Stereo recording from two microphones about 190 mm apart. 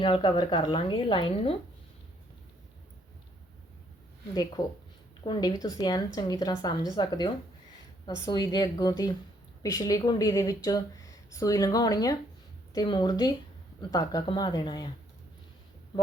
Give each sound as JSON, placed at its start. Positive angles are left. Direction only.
{"t": 0.0, "sound": "a woman's voice", "side_deg": 25}
{"t": 4.6, "sound": "a woman's voice", "side_deg": 15}